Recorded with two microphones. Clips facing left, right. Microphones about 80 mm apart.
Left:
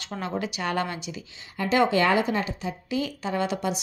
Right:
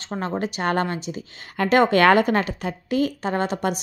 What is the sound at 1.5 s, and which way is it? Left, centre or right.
Speech, right.